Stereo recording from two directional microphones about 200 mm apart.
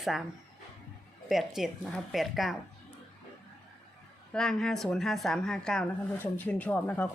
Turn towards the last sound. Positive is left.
turn(degrees=10)  # may be behind; listen again after turning